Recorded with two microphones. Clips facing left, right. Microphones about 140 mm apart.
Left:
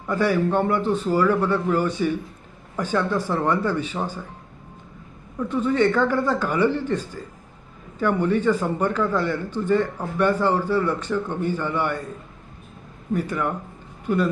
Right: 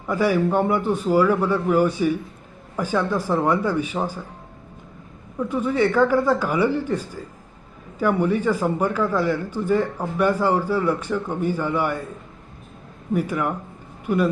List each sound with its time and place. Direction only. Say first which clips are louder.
0.1 s a man's voice: right 1 dB; 10° right (ahead or behind)
5.4 s a man's voice: even; 10° right (ahead or behind)
13.1 s a man's voice: right 2 dB; 10° right (ahead or behind)